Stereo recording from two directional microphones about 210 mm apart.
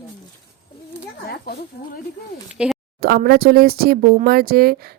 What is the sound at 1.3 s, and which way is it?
Speech, 45° left (ahead or behind).